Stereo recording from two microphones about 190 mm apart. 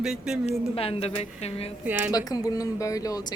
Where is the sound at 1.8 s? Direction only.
10° right (ahead or behind).